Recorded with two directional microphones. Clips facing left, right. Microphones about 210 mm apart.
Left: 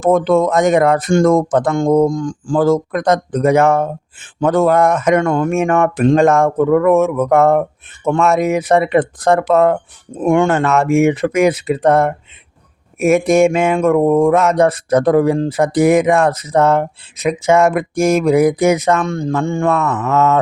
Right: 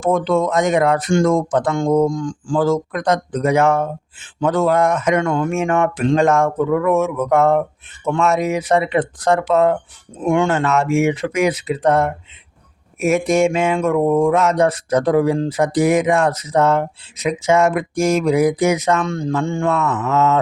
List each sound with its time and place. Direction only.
0.1 s speech: 45° left (ahead or behind)